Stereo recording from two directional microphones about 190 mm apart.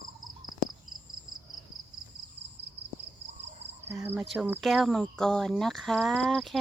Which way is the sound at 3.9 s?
10° right (ahead or behind).